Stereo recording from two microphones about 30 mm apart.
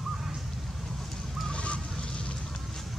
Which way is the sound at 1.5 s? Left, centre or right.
Left.